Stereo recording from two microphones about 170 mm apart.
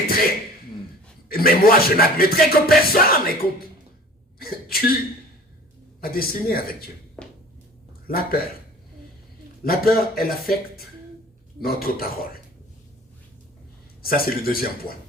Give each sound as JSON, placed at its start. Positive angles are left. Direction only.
{"t": 0.1, "sound": "speech", "side_deg": 60}
{"t": 1.3, "sound": "music", "side_deg": 60}
{"t": 4.4, "sound": "music", "side_deg": 60}
{"t": 6.0, "sound": "music", "side_deg": 60}
{"t": 7.2, "sound": "a sound", "side_deg": 5}
{"t": 8.0, "sound": "speech", "side_deg": 60}
{"t": 9.6, "sound": "music", "side_deg": 60}
{"t": 14.0, "sound": "music", "side_deg": 60}